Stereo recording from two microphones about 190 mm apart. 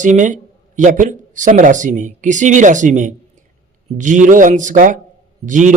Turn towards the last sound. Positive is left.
turn(degrees=-40)  # may be behind; listen again after turning